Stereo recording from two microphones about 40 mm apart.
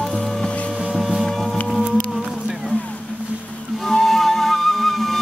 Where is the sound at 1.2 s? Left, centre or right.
Centre.